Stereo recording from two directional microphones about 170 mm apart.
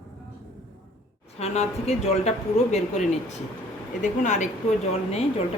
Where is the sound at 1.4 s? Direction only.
40° left (ahead or behind).